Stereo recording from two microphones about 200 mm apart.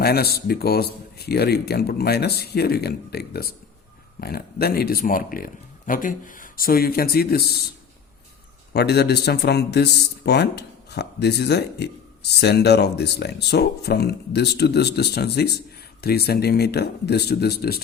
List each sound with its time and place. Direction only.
0.0 s speech: 50° left (ahead or behind)
8.7 s a man's voice: 55° left (ahead or behind)